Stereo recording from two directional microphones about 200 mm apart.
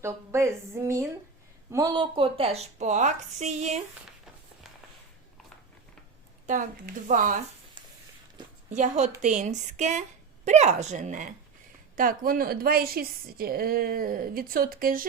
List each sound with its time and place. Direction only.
0.0 s a woman's voice: 15° right (ahead or behind); by 3.8 s 35° right (ahead or behind)
6.5 s a woman's voice: 40° right (ahead or behind)
8.7 s a woman's voice: 40° right (ahead or behind)